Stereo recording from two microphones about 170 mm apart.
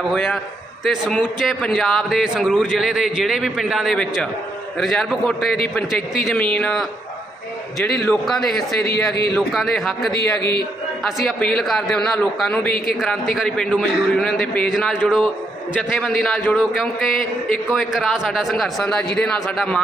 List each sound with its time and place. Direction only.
0.1 s a man's voice: 5° left (ahead or behind)
8.3 s a man's voice: centre (ahead or behind)
8.8 s speech: 70° left (ahead or behind)
9.3 s a man's voice: centre (ahead or behind)
10.1 s speech: 70° left (ahead or behind)
11.1 s a man's voice: centre (ahead or behind)